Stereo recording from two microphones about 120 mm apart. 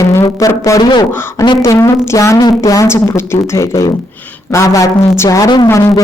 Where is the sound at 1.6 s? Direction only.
25° left (ahead or behind).